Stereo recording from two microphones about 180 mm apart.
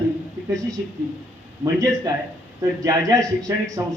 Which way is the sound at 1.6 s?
20° right (ahead or behind).